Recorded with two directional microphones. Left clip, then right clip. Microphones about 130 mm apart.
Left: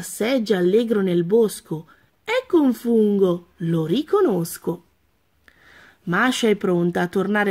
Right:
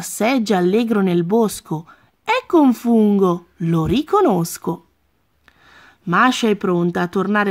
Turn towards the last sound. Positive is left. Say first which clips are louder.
# right 2 dB
turn(degrees=-20)  # may be behind; listen again after turning